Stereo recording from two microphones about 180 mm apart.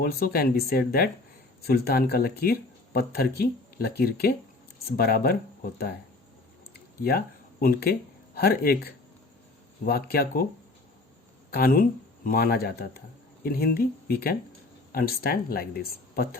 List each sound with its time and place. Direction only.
0.0 s speech: 55° left (ahead or behind)
7.6 s speech: 55° left (ahead or behind)
11.5 s speech: 55° left (ahead or behind)